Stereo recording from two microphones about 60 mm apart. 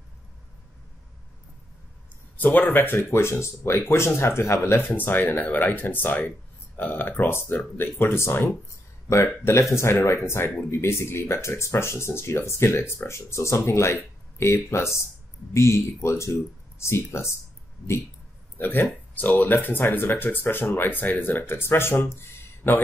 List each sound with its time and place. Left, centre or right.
2.3 s speech: left
18.6 s speech: left